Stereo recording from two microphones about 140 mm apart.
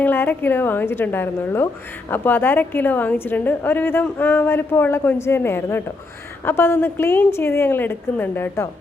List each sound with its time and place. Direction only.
0.0 s a woman's voice: 15° left (ahead or behind)